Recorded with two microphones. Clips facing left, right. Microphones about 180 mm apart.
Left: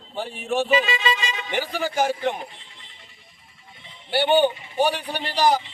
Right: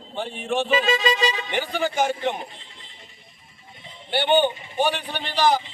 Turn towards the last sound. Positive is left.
turn(degrees=10)  # may be behind; listen again after turning